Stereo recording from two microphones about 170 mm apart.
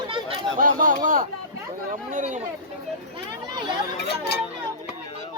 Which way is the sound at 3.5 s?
25° right (ahead or behind).